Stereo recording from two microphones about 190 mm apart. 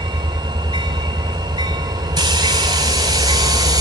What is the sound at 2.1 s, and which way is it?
Train, 20° right (ahead or behind).